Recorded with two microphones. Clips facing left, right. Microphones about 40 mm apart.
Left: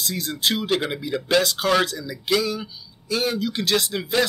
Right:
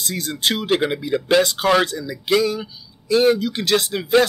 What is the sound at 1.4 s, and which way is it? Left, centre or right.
Speech, right.